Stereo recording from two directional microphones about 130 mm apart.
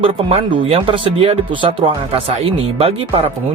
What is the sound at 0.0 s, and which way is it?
Speech, 45° right (ahead or behind).